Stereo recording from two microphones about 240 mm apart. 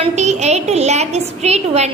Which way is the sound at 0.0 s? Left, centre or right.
Right.